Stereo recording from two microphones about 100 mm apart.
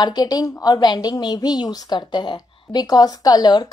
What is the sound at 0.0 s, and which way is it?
A woman's voice, 40° left (ahead or behind).